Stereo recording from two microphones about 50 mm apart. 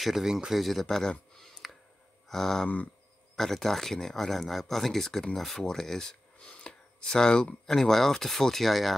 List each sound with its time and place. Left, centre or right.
0.0 s speech: centre
1.6 s a sound: centre
2.2 s speech: centre
6.4 s speech: left; by 8.9 s centre